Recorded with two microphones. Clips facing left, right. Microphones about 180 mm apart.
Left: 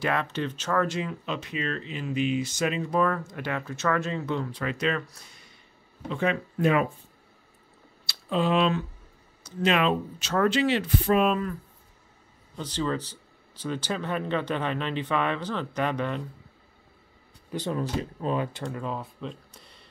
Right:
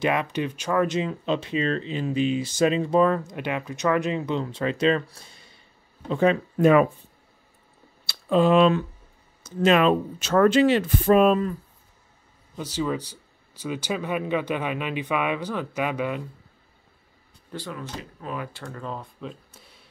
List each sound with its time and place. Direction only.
0.0 s speech: 15° right (ahead or behind); by 6.7 s 35° right (ahead or behind)
8.1 s speech: 45° right (ahead or behind)
12.5 s speech: 10° right (ahead or behind)
17.6 s speech: 30° left (ahead or behind)
18.8 s speech: 5° left (ahead or behind)